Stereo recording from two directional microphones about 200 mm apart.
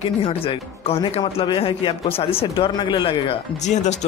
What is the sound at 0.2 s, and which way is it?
Speech, 30° left (ahead or behind).